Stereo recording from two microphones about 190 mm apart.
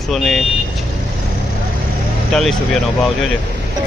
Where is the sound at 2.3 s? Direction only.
Centre (ahead or behind).